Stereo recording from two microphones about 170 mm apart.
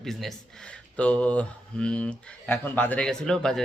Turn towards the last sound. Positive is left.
turn(degrees=5)  # may be behind; listen again after turning